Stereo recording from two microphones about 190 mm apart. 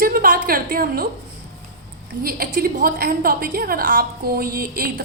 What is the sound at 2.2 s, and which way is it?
A woman's voice, 50° right (ahead or behind).